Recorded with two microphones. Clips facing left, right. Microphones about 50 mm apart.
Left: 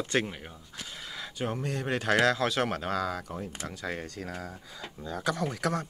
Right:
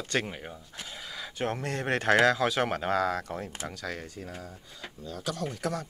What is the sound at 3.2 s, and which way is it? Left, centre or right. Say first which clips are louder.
Speech: right 2 dB; right.